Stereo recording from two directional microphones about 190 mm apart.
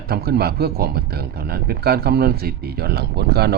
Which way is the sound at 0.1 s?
55° right (ahead or behind).